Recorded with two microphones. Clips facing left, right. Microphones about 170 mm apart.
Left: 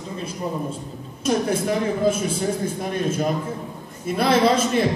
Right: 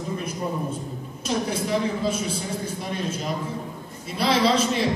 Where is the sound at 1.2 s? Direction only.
50° left (ahead or behind).